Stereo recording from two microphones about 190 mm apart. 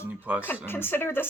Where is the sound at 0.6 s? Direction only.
10° left (ahead or behind).